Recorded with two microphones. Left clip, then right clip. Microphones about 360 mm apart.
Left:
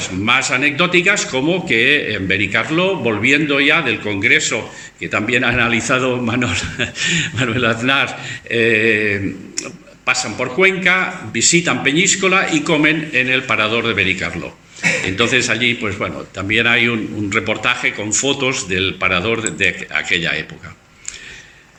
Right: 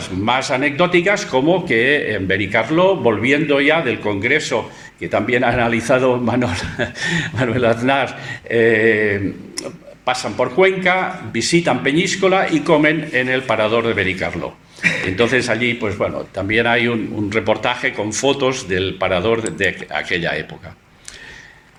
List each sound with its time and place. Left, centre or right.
0.0 s speech: right